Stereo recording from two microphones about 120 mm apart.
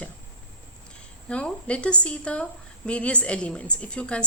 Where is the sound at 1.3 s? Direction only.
10° left (ahead or behind).